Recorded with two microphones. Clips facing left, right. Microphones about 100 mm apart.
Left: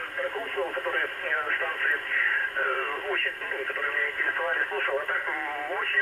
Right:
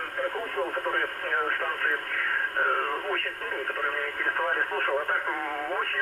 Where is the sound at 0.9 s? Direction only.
40° right (ahead or behind).